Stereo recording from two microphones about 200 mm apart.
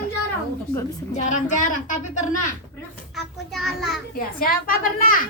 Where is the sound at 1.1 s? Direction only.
35° left (ahead or behind).